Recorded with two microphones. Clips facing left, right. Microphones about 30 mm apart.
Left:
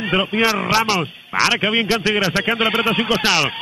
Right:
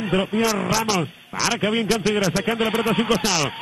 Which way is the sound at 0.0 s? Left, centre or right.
Left.